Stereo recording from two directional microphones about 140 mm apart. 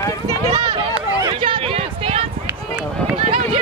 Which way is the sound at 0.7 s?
40° right (ahead or behind).